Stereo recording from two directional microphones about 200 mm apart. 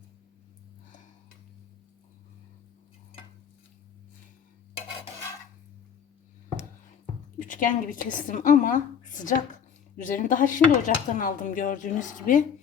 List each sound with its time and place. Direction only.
7.4 s a woman's voice: 40° left (ahead or behind)